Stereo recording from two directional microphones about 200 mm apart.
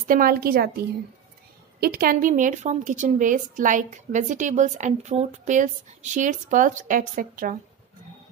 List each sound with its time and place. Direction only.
0.1 s a woman's voice: 45° right (ahead or behind)
1.8 s a woman's voice: 50° right (ahead or behind)